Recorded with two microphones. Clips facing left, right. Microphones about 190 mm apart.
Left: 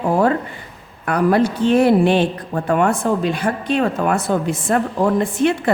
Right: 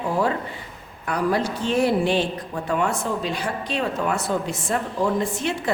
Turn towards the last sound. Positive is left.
turn(degrees=60)  # may be behind; listen again after turning